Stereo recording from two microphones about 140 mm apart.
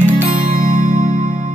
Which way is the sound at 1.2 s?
35° right (ahead or behind).